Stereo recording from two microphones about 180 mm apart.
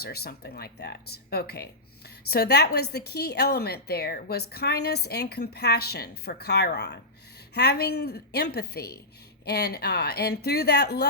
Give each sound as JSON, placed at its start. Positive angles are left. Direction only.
{"t": 0.0, "sound": "speech", "side_deg": 60}